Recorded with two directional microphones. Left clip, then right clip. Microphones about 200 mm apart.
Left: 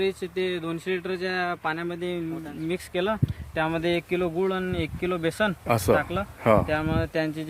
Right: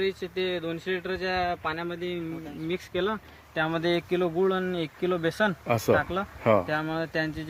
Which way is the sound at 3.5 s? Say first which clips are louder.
Left 1 dB; 15° left (ahead or behind).